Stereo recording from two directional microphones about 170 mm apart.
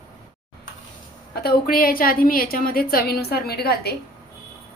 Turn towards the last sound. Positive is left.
turn(degrees=70)  # may be behind; listen again after turning